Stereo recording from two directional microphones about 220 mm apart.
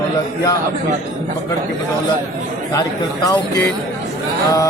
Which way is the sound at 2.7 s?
15° left (ahead or behind).